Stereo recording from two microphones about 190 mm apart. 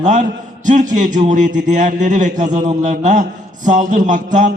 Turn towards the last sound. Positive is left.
turn(degrees=-40)  # may be behind; listen again after turning